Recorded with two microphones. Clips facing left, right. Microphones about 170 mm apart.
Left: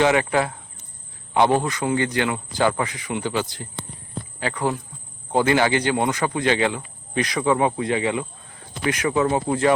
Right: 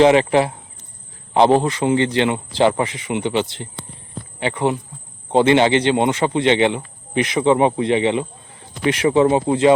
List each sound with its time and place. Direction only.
0.0 s speech: 25° right (ahead or behind)